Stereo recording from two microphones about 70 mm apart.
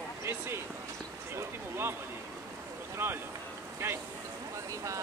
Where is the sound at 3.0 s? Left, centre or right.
Right.